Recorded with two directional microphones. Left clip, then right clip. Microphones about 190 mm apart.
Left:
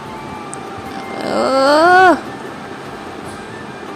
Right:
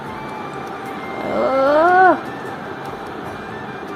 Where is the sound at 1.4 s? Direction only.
40° left (ahead or behind).